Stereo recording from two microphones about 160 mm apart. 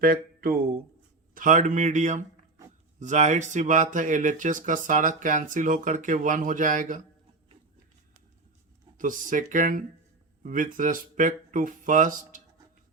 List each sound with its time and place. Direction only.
0.0 s a sound: 65° right (ahead or behind)
1.3 s speech: 55° right (ahead or behind)
9.0 s speech: 55° right (ahead or behind)